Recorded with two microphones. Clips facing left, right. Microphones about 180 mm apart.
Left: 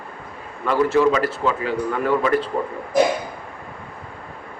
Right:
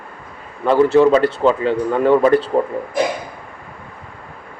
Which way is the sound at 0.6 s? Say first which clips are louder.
Right 5 dB; 30° right (ahead or behind).